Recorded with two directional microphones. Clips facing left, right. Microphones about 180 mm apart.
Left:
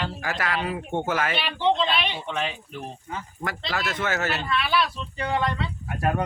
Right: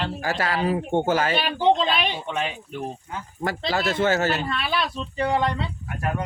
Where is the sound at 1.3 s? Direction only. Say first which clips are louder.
Right 4 dB; 45° right (ahead or behind).